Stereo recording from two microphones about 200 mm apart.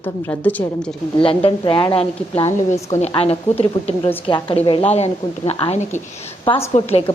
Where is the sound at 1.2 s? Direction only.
25° left (ahead or behind).